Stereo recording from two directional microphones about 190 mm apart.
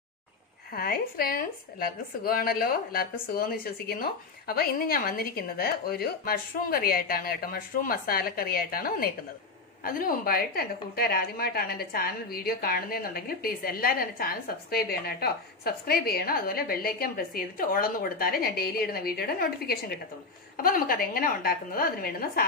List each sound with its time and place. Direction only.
0.7 s a woman's voice: 50° left (ahead or behind)